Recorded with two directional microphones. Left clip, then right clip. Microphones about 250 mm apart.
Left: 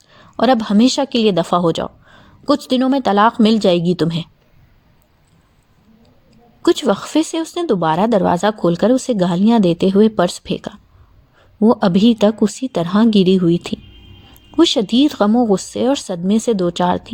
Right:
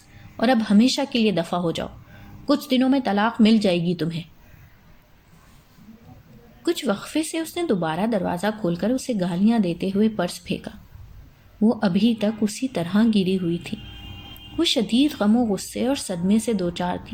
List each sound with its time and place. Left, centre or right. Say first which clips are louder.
0.3 s a woman's voice: left 6 dB; left
6.7 s a woman's voice: left 9 dB; left